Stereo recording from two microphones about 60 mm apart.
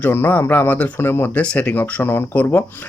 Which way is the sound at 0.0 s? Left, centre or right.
Left.